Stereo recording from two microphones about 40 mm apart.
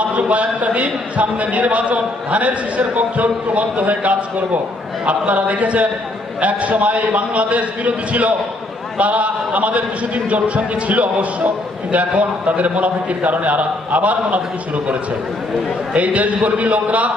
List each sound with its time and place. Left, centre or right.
0.2 s a man's voice: right
15.9 s a man's voice: right